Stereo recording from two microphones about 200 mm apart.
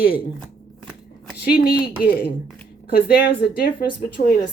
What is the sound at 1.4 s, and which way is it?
Speech, 50° left (ahead or behind).